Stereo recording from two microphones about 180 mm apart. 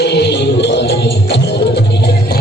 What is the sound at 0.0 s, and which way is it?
Music, 70° left (ahead or behind).